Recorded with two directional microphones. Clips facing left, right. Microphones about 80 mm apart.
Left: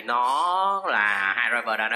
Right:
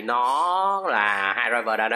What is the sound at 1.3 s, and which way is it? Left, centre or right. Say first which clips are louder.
Speech: right 2 dB; centre.